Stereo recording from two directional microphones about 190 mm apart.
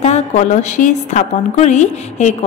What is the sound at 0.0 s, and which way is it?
A woman's voice, 35° left (ahead or behind).